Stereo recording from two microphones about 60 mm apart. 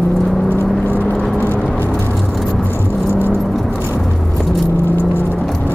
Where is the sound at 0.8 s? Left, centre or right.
Left.